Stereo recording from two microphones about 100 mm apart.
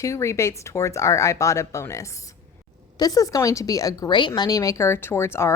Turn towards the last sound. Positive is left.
turn(degrees=25)  # may be behind; listen again after turning